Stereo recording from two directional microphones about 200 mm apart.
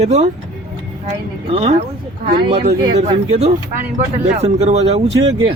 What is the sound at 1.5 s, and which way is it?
Speech, 30° right (ahead or behind).